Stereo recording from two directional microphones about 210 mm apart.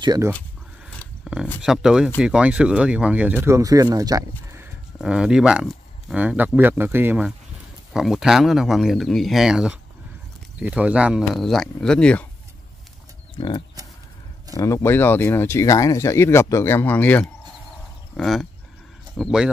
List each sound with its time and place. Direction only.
0.0 s speech: 20° right (ahead or behind)
0.8 s a sound: centre (ahead or behind)
1.6 s speech: 5° right (ahead or behind)
4.9 s speech: 5° right (ahead or behind)
13.4 s speech: 20° left (ahead or behind)
14.6 s speech: 15° left (ahead or behind)